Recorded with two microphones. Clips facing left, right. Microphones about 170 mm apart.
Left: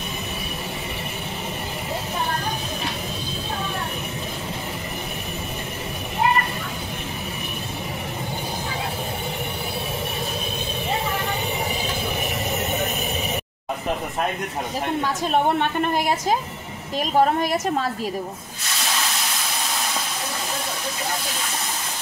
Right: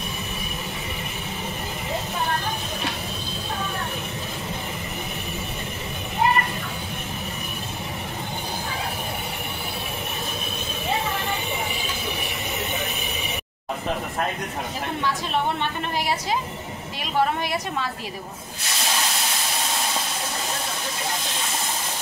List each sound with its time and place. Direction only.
15.3 s a woman's voice: 50° left (ahead or behind)